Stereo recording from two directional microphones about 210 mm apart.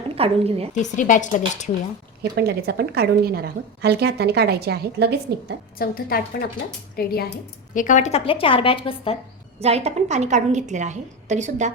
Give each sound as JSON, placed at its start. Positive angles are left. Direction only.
{"t": 0.2, "sound": "speech", "side_deg": -30}
{"t": 0.7, "sound": "speech", "side_deg": 35}
{"t": 2.3, "sound": "a woman's voice", "side_deg": -50}
{"t": 5.8, "sound": "a woman's voice", "side_deg": 45}
{"t": 9.6, "sound": "a woman's voice", "side_deg": -30}